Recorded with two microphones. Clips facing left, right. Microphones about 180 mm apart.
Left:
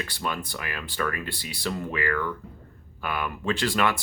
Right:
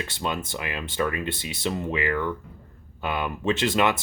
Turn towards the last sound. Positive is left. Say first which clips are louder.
# right 3 dB
turn(degrees=-20)  # may be behind; listen again after turning